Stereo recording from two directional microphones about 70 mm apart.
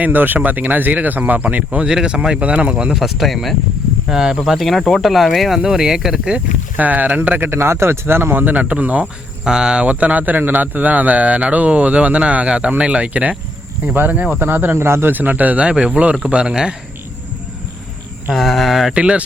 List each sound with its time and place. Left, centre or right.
0.0 s speech: right
1.9 s speech: centre
5.5 s speech: centre
6.7 s speech: right
18.3 s speech: centre
18.9 s speech: centre